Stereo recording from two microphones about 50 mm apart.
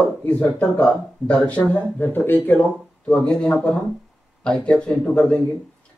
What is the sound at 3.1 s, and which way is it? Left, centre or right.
Speech, centre.